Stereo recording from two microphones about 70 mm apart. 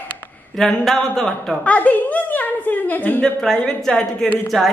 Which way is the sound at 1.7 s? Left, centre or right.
Left.